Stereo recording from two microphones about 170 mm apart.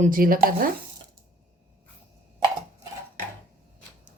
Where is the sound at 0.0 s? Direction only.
55° right (ahead or behind).